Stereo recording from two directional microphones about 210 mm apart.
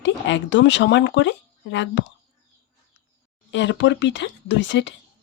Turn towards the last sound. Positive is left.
turn(degrees=60)  # may be behind; listen again after turning